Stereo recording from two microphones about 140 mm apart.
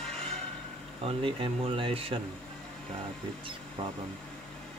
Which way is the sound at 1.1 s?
40° right (ahead or behind).